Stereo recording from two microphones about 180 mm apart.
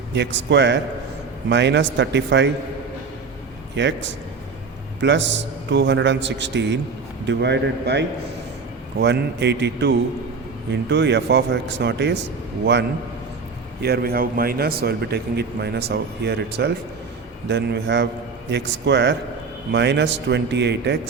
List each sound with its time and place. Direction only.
0.1 s a man's voice: 75° right (ahead or behind)
3.8 s a man's voice: 80° right
13.8 s a man's voice: 60° right (ahead or behind)